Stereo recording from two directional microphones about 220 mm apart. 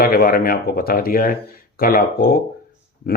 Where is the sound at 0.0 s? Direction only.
40° left (ahead or behind).